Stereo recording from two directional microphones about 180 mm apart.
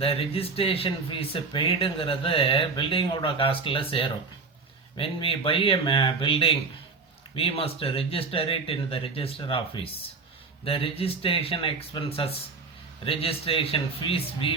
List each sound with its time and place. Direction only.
0.0 s speech: 30° left (ahead or behind)